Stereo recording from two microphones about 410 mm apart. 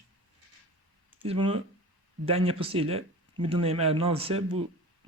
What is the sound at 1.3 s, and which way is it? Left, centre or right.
Speech, centre.